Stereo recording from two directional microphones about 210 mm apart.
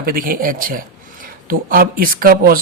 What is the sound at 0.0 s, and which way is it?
Speech, 45° right (ahead or behind).